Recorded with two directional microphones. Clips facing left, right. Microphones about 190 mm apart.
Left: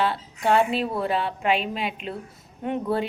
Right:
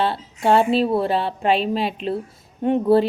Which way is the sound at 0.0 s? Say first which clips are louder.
Right 3 dB; 30° right (ahead or behind).